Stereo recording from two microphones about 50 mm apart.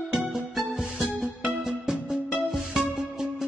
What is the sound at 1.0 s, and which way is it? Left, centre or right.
Music, centre.